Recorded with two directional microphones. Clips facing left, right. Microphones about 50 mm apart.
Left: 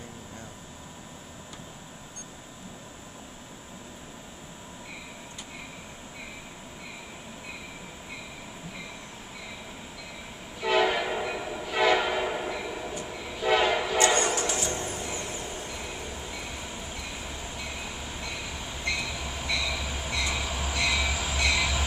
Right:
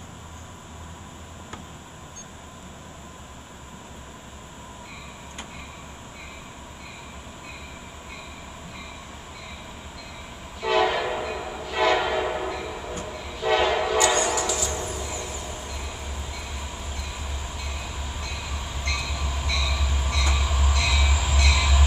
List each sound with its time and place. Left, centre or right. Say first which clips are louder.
10.6 s train horn: right 2 dB; centre
13.1 s train: right 2 dB; centre
13.9 s train: right 2 dB; left
14.9 s vehicle: right 2 dB; left
15.7 s train: right 1 dB; centre